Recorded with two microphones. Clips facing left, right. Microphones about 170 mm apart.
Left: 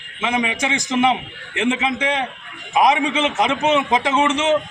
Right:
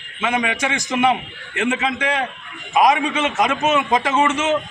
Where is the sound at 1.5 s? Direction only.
20° left (ahead or behind).